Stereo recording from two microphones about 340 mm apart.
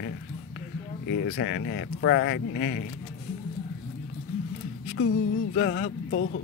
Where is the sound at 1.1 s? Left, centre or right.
Left.